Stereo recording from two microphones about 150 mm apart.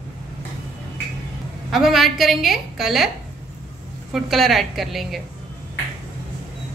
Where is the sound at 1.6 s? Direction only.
Centre (ahead or behind).